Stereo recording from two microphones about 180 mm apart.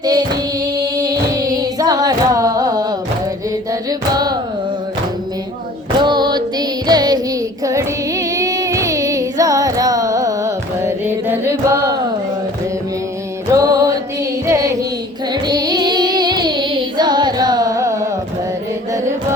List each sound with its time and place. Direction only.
1.0 s carnatic music: 20° right (ahead or behind)
3.7 s music: 20° right (ahead or behind)
6.0 s music: 25° right (ahead or behind)
7.6 s female singing: 20° right (ahead or behind)
13.5 s music: 20° right (ahead or behind)